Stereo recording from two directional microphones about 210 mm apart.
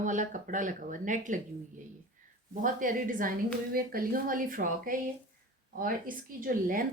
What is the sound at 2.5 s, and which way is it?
Speech, 40° right (ahead or behind).